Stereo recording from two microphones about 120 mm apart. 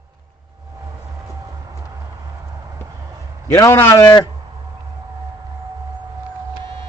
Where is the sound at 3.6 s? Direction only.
20° left (ahead or behind).